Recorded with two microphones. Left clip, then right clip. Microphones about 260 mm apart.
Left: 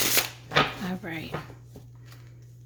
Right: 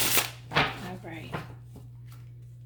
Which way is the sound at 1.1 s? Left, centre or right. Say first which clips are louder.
Left 6 dB; left.